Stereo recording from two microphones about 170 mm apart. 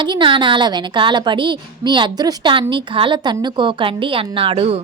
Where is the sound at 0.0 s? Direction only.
30° right (ahead or behind).